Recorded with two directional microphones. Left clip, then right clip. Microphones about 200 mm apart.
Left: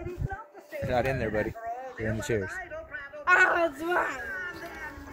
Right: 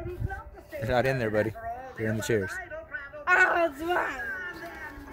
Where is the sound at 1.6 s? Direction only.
30° left (ahead or behind).